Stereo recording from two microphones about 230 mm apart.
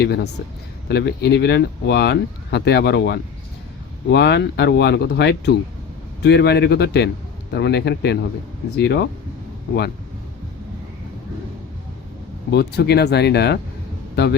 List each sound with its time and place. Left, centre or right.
0.0 s speech: left
12.5 s speech: left